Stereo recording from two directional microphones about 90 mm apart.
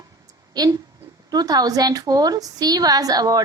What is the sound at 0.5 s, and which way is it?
A woman's voice, 45° right (ahead or behind).